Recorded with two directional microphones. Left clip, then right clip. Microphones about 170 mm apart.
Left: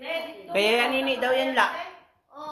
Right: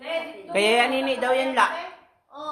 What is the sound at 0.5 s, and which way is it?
A man's voice, 10° right (ahead or behind).